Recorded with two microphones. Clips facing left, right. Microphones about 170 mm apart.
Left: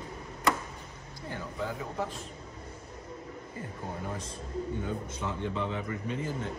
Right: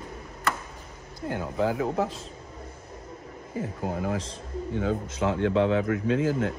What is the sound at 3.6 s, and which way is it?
A man's voice, 90° right.